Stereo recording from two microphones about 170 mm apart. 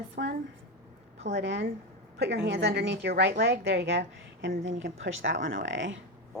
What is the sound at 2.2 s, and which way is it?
A woman's voice, 75° right (ahead or behind).